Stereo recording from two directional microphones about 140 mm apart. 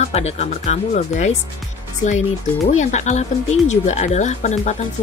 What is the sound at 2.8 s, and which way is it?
Speech, 55° left (ahead or behind).